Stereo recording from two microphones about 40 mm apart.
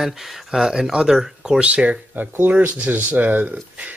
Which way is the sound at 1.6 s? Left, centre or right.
Right.